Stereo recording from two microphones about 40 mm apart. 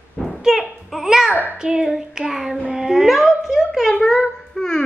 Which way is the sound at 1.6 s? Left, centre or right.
Centre.